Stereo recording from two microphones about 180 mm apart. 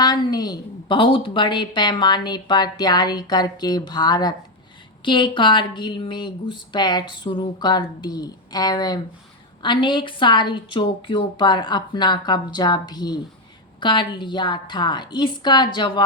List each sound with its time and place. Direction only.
0.0 s a woman's voice: 20° left (ahead or behind)